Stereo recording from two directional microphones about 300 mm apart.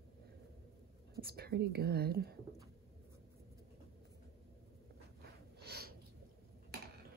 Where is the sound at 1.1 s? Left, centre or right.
Right.